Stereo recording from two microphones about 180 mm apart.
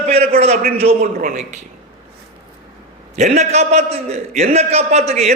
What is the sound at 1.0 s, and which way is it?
Speech, 50° right (ahead or behind).